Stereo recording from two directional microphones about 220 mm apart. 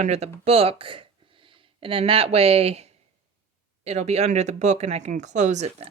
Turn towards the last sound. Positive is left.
turn(degrees=-30)  # may be behind; listen again after turning